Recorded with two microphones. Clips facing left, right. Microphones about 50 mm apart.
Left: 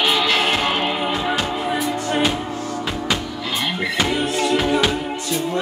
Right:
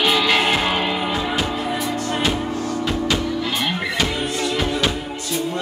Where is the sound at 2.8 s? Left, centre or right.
Centre.